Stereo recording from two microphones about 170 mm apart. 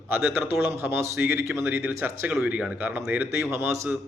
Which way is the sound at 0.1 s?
15° right (ahead or behind).